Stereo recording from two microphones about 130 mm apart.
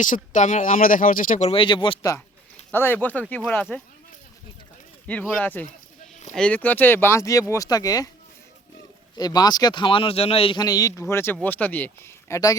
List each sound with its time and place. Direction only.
0.0 s speech: 75° left (ahead or behind)
1.5 s speech: 40° left (ahead or behind)
2.7 s speech: 15° left (ahead or behind)
5.4 s speech: 10° left (ahead or behind); by 8.1 s 30° left (ahead or behind)
9.1 s speech: 30° left (ahead or behind); by 10.6 s 50° left (ahead or behind)
10.6 s speech: 30° left (ahead or behind)